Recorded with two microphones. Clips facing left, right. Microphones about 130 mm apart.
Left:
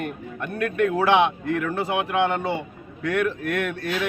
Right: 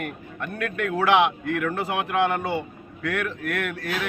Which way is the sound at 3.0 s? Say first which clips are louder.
Left 4 dB; 20° left (ahead or behind).